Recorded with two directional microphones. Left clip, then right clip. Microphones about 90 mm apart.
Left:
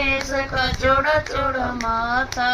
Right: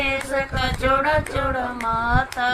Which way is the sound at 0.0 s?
40° right (ahead or behind).